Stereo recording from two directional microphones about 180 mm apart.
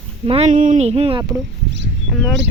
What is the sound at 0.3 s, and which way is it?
Speech, 40° right (ahead or behind).